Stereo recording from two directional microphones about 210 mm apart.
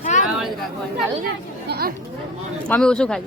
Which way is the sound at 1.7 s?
45° right (ahead or behind).